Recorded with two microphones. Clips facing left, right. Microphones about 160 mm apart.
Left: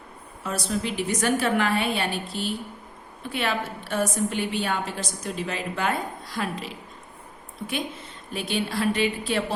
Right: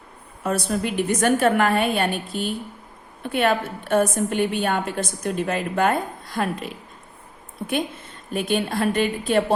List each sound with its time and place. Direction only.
0.4 s a woman's voice: 55° right (ahead or behind)